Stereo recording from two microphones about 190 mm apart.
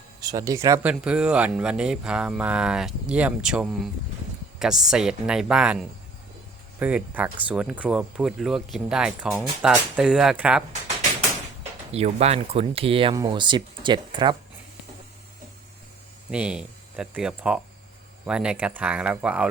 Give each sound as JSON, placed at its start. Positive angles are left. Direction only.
{"t": 0.2, "sound": "speech", "side_deg": -20}
{"t": 11.9, "sound": "speech", "side_deg": -35}
{"t": 16.3, "sound": "speech", "side_deg": -5}